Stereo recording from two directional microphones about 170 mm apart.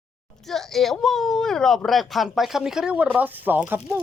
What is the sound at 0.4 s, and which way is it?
Speech, centre (ahead or behind).